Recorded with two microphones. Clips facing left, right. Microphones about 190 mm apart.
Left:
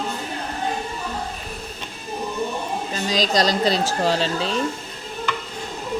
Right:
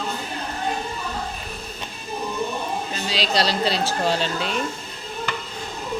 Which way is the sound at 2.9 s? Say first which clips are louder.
Left 4 dB; 40° left (ahead or behind).